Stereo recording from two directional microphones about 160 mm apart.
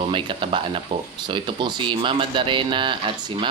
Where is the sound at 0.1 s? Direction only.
30° right (ahead or behind).